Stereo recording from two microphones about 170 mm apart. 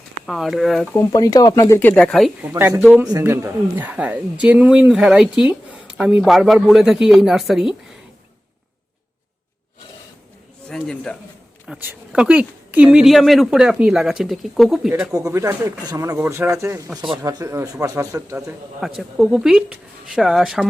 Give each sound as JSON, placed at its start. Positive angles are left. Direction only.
{"t": 0.3, "sound": "speech", "side_deg": 0}
{"t": 0.9, "sound": "speech", "side_deg": 20}
{"t": 2.4, "sound": "speech", "side_deg": -15}
{"t": 3.1, "sound": "speech", "side_deg": -15}
{"t": 10.7, "sound": "a man's voice", "side_deg": 5}
{"t": 11.8, "sound": "speech", "side_deg": -10}
{"t": 15.1, "sound": "speech", "side_deg": -15}
{"t": 18.8, "sound": "speech", "side_deg": -5}